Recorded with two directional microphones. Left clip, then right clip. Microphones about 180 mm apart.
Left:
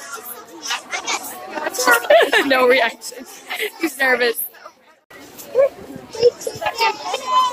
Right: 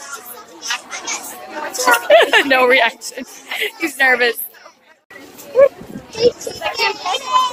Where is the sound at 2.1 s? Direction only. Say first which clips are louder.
Right 4 dB; 10° left (ahead or behind).